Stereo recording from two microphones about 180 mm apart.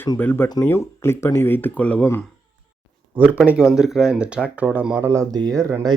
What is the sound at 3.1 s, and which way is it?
Speech, 10° right (ahead or behind).